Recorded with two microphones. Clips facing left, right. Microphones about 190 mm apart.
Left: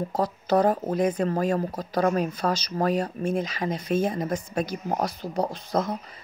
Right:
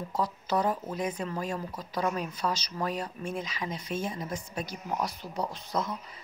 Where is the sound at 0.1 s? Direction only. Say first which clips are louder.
Left 6 dB; 45° left (ahead or behind).